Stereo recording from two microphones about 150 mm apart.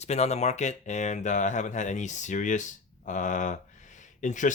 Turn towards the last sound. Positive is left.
turn(degrees=55)  # may be behind; listen again after turning